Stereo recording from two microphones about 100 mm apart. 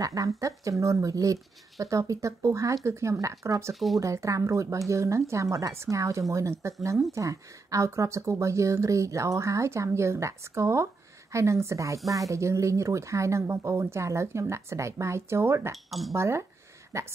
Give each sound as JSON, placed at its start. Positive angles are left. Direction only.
{"t": 0.0, "sound": "speech", "side_deg": -35}
{"t": 15.7, "sound": "speech", "side_deg": 0}
{"t": 16.1, "sound": "speech", "side_deg": -30}